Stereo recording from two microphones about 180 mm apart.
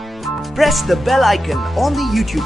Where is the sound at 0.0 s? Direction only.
Centre (ahead or behind).